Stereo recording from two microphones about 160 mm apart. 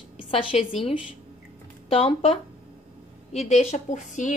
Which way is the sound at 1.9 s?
35° left (ahead or behind).